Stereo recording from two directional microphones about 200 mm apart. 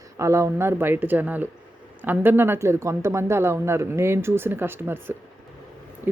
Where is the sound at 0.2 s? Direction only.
15° right (ahead or behind).